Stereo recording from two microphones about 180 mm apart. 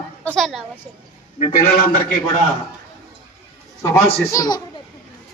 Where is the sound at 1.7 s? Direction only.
50° left (ahead or behind).